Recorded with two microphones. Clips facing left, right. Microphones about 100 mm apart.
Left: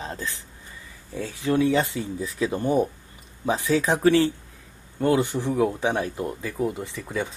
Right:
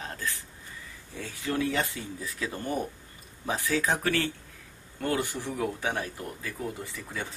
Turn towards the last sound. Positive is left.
turn(degrees=20)  # may be behind; listen again after turning